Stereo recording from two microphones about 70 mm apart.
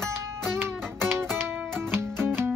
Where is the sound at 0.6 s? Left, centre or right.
Right.